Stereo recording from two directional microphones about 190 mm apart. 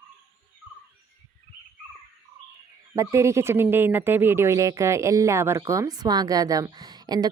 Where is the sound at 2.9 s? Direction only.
15° right (ahead or behind).